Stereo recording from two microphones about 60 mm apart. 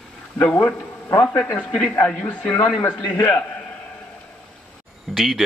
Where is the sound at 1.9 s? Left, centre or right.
Left.